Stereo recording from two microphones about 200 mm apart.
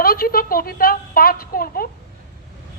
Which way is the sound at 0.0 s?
50° left (ahead or behind).